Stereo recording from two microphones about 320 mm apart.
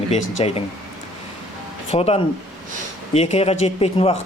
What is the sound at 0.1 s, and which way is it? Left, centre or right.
Speech, centre.